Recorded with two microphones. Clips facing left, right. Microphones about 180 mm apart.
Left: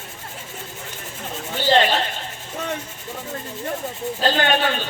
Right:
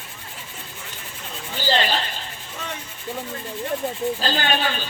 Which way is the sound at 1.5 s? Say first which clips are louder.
Left 5 dB; 60° left (ahead or behind).